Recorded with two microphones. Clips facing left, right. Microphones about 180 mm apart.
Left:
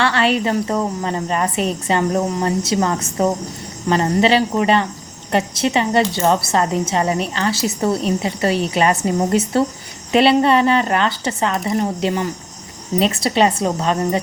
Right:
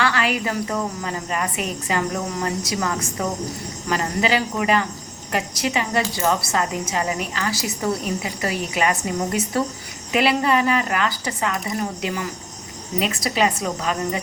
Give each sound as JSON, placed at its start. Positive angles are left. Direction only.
{"t": 0.0, "sound": "a woman's voice", "side_deg": 30}